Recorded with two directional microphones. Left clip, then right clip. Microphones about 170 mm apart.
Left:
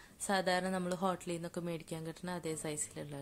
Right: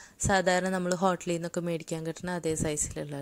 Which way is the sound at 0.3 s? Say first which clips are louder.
Right 8 dB; 40° right (ahead or behind).